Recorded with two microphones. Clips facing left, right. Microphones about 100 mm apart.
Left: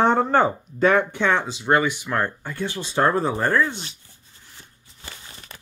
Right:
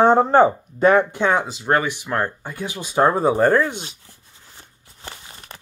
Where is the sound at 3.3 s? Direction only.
30° right (ahead or behind).